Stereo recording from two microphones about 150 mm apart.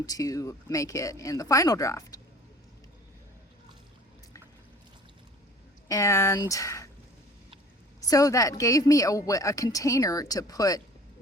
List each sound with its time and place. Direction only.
0.0 s a woman's voice: 25° left (ahead or behind)
5.9 s a woman's voice: 20° left (ahead or behind)
8.0 s a woman's voice: 25° left (ahead or behind)